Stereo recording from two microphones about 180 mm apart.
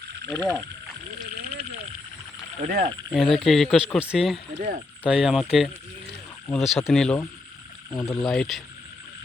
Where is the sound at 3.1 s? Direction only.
Centre (ahead or behind).